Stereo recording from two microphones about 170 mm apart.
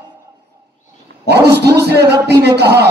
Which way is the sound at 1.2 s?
75° right (ahead or behind).